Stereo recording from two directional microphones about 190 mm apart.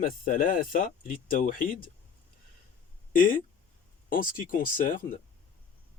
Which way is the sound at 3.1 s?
45° left (ahead or behind).